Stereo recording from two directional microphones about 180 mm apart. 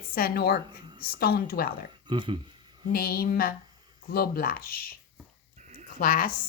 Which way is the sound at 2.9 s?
55° left (ahead or behind).